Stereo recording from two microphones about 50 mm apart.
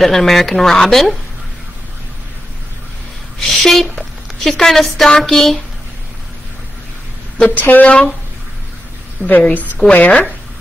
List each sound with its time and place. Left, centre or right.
0.0 s speech: centre
3.3 s speech: centre
7.4 s speech: left
9.2 s a woman's voice: centre
9.8 s speech: left